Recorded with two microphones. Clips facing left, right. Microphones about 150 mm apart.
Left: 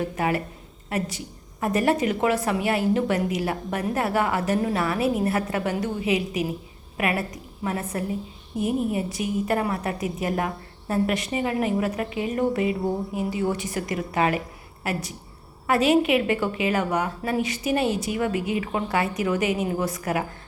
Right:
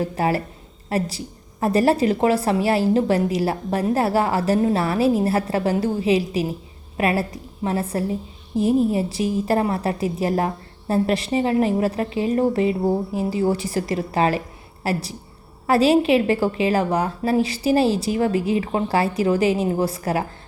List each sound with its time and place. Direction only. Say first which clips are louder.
0.0 s a woman's voice: right 3 dB; 35° right (ahead or behind)